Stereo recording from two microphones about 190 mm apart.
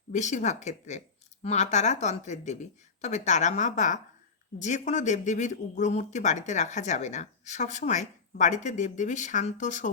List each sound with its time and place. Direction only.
0.1 s a woman's voice: 40° left (ahead or behind)